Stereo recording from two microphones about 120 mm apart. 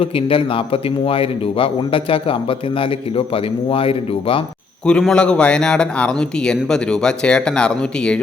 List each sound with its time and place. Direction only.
0.0 s speech: 50° left (ahead or behind)
4.9 s speech: 10° left (ahead or behind)